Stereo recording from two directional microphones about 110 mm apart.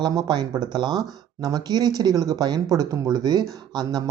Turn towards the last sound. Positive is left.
turn(degrees=-35)  # may be behind; listen again after turning